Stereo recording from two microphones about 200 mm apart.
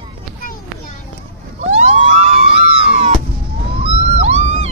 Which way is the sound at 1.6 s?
35° right (ahead or behind).